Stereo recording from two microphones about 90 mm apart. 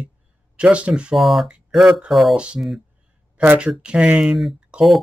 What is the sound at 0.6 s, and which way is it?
Speech, 15° right (ahead or behind).